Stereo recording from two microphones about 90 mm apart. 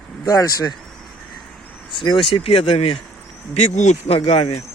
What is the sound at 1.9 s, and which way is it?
Speech, 65° left (ahead or behind).